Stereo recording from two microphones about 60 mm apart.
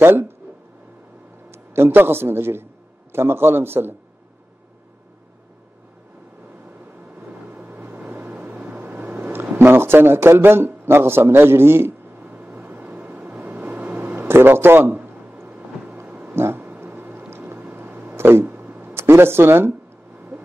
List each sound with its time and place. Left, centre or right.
0.0 s speech: right
1.5 s a man's voice: right
7.2 s vehicle: right
9.6 s a man's voice: right
12.2 s a sound: right
14.2 s a sound: right
16.3 s cat: right
16.8 s a sound: right
18.9 s speech: right